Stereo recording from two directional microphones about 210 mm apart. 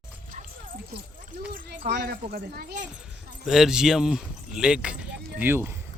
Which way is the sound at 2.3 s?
50° right (ahead or behind).